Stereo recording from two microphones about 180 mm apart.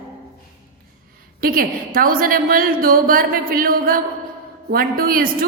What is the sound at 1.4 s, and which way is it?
A woman's voice, 55° right (ahead or behind).